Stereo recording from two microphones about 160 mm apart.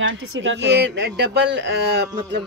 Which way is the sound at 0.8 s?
90° right.